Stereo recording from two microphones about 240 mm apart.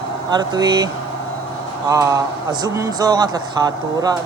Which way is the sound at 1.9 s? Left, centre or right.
Centre.